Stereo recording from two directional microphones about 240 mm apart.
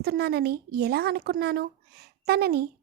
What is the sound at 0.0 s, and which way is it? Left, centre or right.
A woman's voice, right.